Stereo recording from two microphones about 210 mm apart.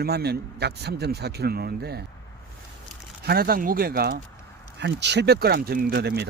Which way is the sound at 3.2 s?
45° right (ahead or behind).